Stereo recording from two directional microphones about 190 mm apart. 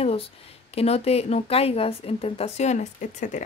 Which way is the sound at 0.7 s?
35° left (ahead or behind).